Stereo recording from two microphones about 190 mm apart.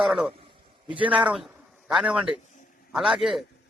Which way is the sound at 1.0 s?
5° right (ahead or behind).